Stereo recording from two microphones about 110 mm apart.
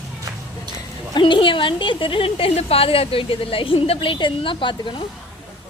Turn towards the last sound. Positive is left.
turn(degrees=45)  # may be behind; listen again after turning